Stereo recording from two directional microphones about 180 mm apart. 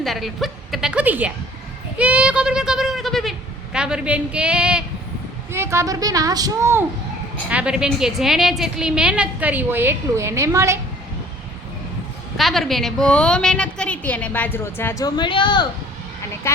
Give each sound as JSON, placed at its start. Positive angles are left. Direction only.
{"t": 0.0, "sound": "a woman's voice", "side_deg": 0}
{"t": 12.4, "sound": "a woman's voice", "side_deg": 0}